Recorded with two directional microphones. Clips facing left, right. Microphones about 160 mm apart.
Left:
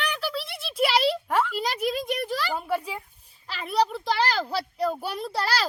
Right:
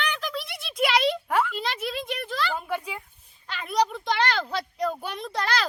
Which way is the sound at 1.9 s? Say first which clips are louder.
Left 4 dB; 40° left (ahead or behind).